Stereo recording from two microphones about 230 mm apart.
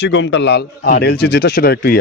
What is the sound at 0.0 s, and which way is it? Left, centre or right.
Speech, left.